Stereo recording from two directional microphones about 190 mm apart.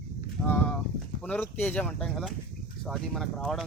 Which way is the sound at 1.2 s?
5° left (ahead or behind).